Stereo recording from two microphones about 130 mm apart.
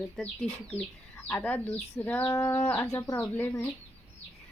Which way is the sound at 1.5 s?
15° left (ahead or behind).